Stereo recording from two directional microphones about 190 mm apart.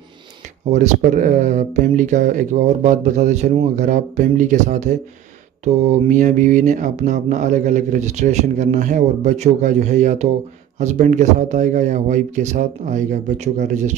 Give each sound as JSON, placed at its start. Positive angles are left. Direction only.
{"t": 0.7, "sound": "speech", "side_deg": -40}